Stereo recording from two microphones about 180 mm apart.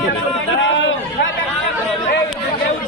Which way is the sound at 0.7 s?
90° left.